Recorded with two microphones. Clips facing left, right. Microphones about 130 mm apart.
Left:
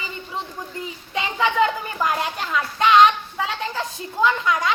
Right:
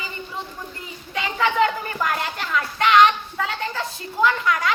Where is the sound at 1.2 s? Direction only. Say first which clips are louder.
Even; 20° left (ahead or behind).